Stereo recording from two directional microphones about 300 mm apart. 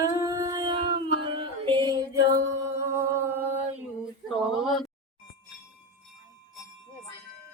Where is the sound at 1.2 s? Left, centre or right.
Centre.